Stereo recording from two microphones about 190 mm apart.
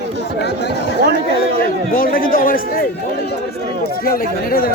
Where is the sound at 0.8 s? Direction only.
65° right (ahead or behind).